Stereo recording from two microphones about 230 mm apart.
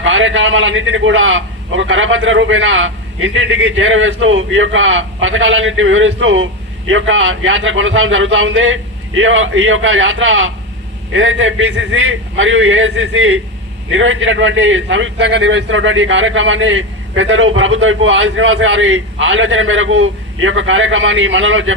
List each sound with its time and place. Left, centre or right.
0.0 s a man's voice: right